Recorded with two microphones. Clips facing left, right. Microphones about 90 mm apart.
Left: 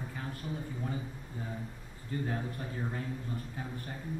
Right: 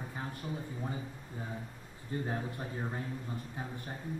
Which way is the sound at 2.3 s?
20° right (ahead or behind).